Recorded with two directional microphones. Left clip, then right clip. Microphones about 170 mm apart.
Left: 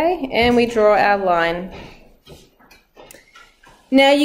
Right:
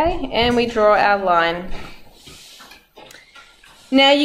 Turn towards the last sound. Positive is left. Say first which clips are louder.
# even
turn(degrees=15)  # may be behind; listen again after turning